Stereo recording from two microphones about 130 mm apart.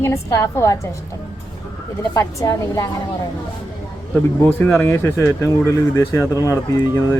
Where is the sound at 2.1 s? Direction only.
25° left (ahead or behind).